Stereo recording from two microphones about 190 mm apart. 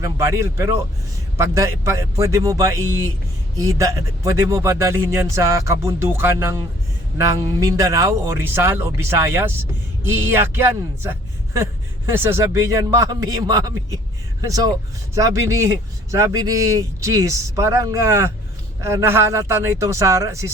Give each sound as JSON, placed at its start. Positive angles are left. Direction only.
{"t": 0.0, "sound": "a man's voice", "side_deg": -15}